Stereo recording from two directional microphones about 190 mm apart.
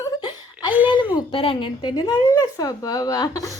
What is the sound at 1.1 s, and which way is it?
A woman's voice, 25° left (ahead or behind).